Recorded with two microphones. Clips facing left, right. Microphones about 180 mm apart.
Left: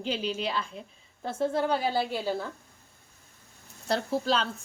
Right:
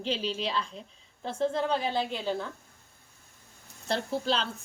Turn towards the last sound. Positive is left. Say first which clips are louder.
# left 2 dB
turn(degrees=0)  # may be behind; listen again after turning